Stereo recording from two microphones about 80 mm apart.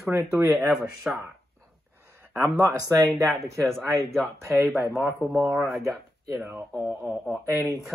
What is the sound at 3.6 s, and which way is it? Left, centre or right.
Speech, centre.